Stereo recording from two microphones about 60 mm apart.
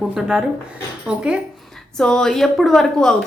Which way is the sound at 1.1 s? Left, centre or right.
Centre.